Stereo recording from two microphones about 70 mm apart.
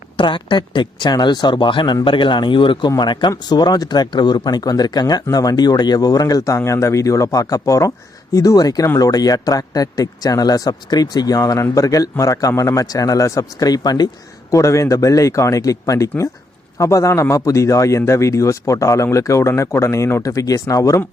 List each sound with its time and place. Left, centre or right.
0.5 s a man's voice: left
11.3 s speech: left
14.5 s a man's voice: left
20.2 s a man's voice: left